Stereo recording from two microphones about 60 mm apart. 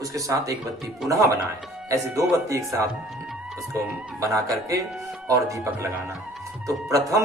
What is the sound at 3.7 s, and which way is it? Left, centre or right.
Speech, right.